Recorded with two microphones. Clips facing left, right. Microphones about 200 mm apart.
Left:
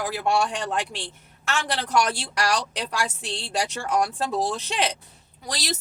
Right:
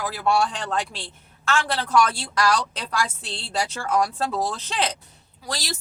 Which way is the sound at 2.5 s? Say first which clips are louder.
Right 1 dB; 15° left (ahead or behind).